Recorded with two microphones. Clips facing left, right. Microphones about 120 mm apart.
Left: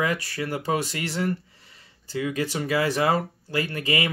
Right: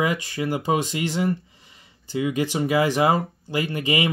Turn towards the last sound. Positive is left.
turn(degrees=-20)  # may be behind; listen again after turning